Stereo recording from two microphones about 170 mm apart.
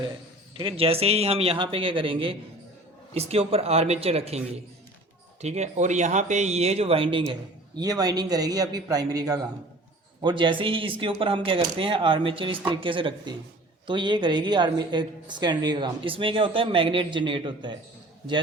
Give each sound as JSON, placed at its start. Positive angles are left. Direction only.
{"t": 0.5, "sound": "speech", "side_deg": -30}